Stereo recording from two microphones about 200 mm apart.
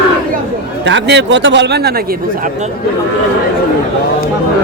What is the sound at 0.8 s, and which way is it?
A man's voice, 65° right (ahead or behind).